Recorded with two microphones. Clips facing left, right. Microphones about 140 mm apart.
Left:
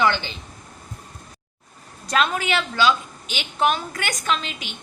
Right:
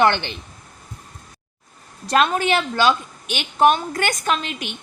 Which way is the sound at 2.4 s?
45° right (ahead or behind).